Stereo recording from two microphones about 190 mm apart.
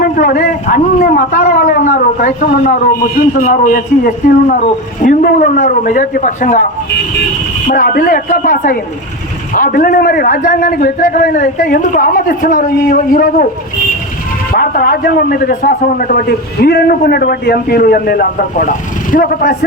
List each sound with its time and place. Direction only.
0.0 s a man's voice: 50° left (ahead or behind)
7.7 s a man's voice: 45° left (ahead or behind)
14.5 s a man's voice: 50° left (ahead or behind)